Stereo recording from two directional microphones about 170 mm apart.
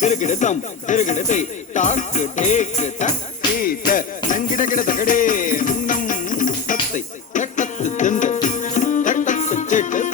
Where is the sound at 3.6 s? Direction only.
55° left (ahead or behind).